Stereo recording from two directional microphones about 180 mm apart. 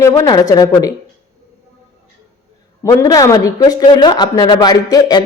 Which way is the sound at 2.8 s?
20° left (ahead or behind).